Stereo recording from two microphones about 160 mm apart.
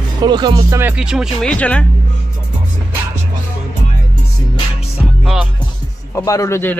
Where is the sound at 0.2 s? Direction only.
30° right (ahead or behind); by 1.9 s 10° left (ahead or behind).